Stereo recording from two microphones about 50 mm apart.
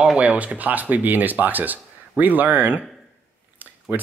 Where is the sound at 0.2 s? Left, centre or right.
Right.